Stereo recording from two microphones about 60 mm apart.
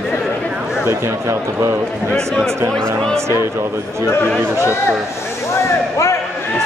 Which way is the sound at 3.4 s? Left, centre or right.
Right.